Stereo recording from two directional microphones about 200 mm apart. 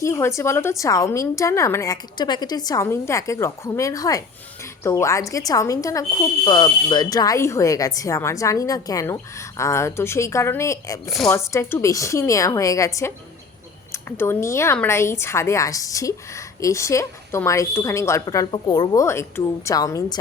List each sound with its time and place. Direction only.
0.0 s speech: 15° left (ahead or behind)